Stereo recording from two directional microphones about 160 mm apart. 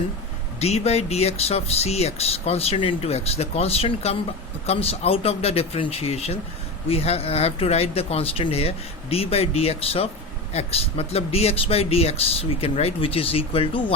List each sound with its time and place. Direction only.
0.6 s speech: 40° left (ahead or behind)